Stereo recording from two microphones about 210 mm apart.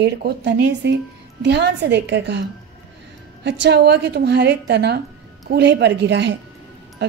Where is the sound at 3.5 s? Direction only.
55° right (ahead or behind).